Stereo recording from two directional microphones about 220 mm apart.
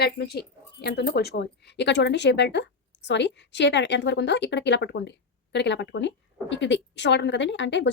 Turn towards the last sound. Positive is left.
turn(degrees=55)  # may be behind; listen again after turning